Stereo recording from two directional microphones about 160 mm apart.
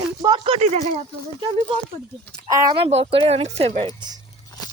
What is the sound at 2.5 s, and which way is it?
Speech, 20° right (ahead or behind).